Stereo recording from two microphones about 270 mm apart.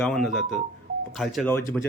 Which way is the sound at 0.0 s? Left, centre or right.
Centre.